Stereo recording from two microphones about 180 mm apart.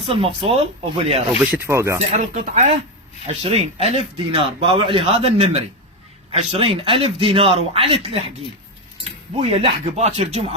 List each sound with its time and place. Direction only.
0.1 s speech: 30° right (ahead or behind)
1.5 s speech: 10° right (ahead or behind)
2.0 s speech: 40° right (ahead or behind)
9.4 s speech: 30° right (ahead or behind)